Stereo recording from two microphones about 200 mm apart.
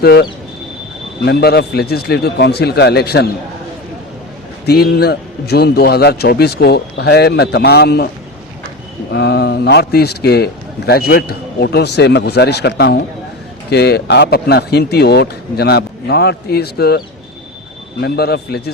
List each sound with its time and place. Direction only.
0.0 s a man's voice: 50° left (ahead or behind)
4.6 s a man's voice: 55° left (ahead or behind)
9.1 s a man's voice: 55° left (ahead or behind)
18.0 s a man's voice: 55° left (ahead or behind)